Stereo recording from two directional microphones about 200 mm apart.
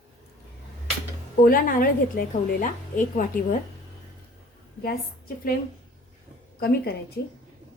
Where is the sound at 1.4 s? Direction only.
45° left (ahead or behind).